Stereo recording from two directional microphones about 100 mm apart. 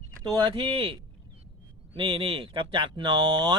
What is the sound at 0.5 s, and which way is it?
Speech, 65° right (ahead or behind).